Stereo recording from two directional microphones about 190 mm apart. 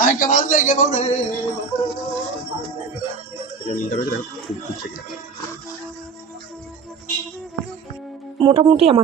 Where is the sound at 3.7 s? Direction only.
40° left (ahead or behind).